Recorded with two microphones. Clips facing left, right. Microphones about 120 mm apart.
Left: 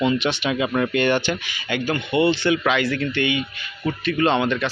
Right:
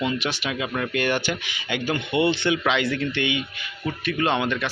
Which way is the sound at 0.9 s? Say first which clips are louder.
Left 4 dB; 5° right (ahead or behind).